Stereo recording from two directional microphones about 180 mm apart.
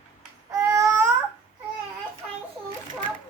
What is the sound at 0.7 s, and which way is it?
Babbling, 15° right (ahead or behind).